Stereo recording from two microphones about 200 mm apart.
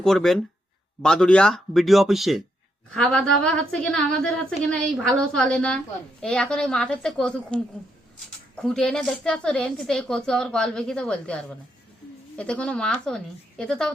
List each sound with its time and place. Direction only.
0.0 s a woman's voice: centre (ahead or behind)